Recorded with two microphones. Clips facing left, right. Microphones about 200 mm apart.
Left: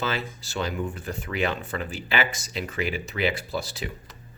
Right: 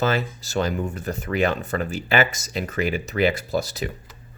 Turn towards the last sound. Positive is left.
turn(degrees=-45)  # may be behind; listen again after turning